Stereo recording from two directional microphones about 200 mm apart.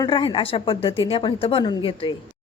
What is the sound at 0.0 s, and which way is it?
A woman's voice, 25° left (ahead or behind).